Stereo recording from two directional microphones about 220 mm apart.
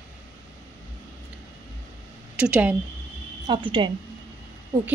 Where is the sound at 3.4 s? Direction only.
20° right (ahead or behind).